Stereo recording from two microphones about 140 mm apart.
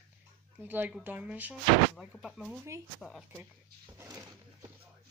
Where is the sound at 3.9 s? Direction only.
20° right (ahead or behind).